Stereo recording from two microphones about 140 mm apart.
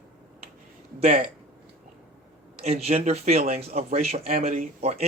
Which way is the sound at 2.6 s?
45° right (ahead or behind).